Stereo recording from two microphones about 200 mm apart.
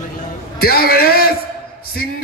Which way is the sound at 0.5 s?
50° left (ahead or behind).